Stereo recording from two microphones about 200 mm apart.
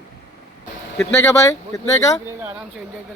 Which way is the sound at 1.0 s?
15° left (ahead or behind).